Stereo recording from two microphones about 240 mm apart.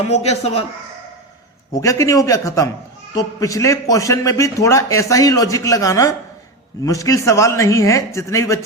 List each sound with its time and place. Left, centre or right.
0.0 s a man's voice: left
1.7 s a man's voice: centre